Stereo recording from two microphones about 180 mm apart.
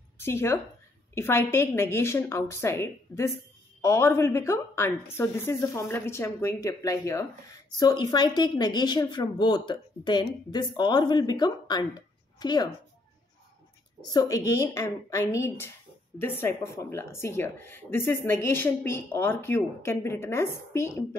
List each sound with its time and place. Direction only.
0.2 s a woman's voice: 15° left (ahead or behind)
14.0 s a woman's voice: 20° left (ahead or behind)